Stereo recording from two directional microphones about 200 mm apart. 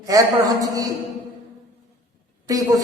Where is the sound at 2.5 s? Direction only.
15° right (ahead or behind).